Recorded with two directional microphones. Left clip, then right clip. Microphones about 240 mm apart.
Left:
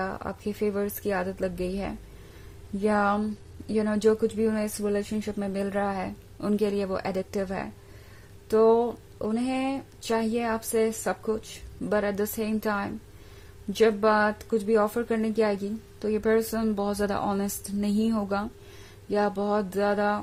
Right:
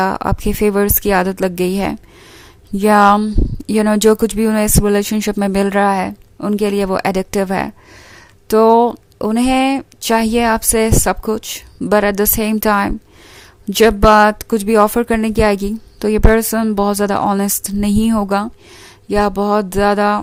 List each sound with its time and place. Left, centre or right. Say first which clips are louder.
0.0 s speech: right 15 dB; right